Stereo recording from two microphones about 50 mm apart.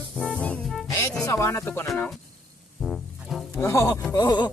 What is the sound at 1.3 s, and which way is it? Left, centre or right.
Music, left.